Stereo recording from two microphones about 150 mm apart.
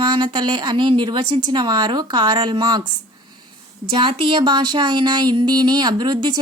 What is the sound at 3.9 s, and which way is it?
Speech, 35° right (ahead or behind).